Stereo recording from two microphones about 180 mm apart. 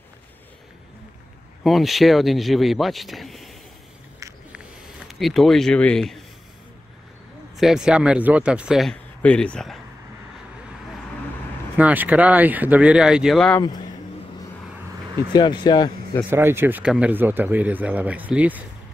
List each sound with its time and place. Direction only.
1.6 s speech: centre (ahead or behind)
4.2 s a sound: 15° right (ahead or behind)
5.0 s speech: centre (ahead or behind)
7.5 s speech: 5° right (ahead or behind)
11.7 s speech: 10° right (ahead or behind)
15.3 s speech: 25° left (ahead or behind)
16.3 s speech: 10° right (ahead or behind)